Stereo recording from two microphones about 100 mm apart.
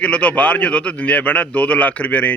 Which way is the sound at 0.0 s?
10° left (ahead or behind).